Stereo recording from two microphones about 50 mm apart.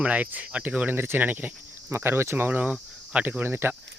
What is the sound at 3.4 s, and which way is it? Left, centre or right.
Speech, right.